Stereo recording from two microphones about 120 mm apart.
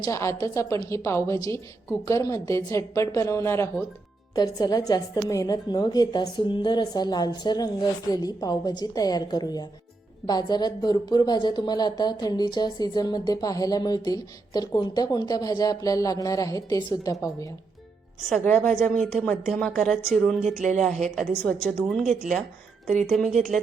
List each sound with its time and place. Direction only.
0.0 s a woman's voice: 25° left (ahead or behind)
4.4 s speech: 30° left (ahead or behind)
18.4 s a woman's voice: 10° left (ahead or behind)